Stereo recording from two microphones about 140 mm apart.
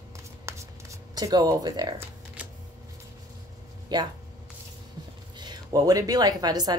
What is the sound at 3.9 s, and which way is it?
Speech, 30° right (ahead or behind).